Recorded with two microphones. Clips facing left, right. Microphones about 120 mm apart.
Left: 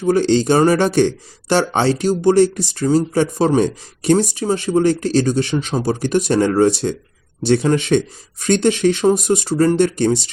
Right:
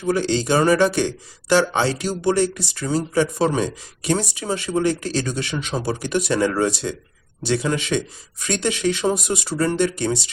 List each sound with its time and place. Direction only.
0.0 s speech: 35° left (ahead or behind)